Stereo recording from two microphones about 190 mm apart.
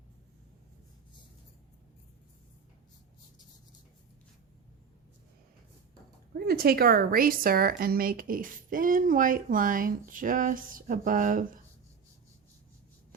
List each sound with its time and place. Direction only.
6.3 s a woman's voice: 55° right (ahead or behind)